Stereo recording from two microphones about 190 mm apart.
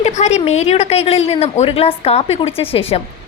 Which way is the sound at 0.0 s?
35° left (ahead or behind).